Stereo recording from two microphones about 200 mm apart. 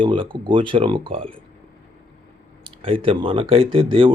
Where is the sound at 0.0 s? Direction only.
25° right (ahead or behind).